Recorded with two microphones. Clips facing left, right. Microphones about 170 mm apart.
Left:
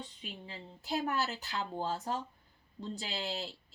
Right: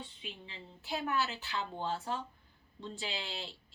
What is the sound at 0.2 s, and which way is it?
Speech, 40° left (ahead or behind).